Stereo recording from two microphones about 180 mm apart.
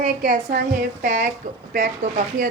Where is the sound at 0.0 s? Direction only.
50° right (ahead or behind).